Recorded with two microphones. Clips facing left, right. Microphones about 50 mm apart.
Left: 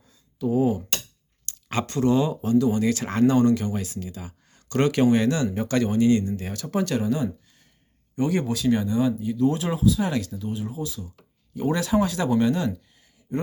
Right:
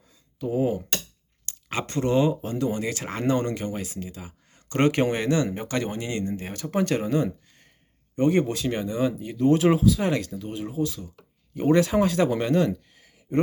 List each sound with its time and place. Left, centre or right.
0.3 s a sound: right
1.9 s speech: right
3.1 s speech: centre
3.3 s speech: right
8.2 s speech: right
9.2 s speech: right
10.1 s speech: right
12.9 s a sound: right